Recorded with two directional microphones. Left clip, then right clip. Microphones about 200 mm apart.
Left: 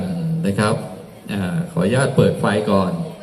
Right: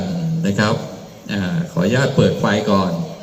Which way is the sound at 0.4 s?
40° left (ahead or behind).